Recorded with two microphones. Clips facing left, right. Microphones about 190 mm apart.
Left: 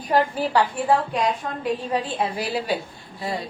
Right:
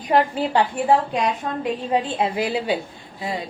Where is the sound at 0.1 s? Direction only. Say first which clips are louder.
Right 1 dB; 20° right (ahead or behind).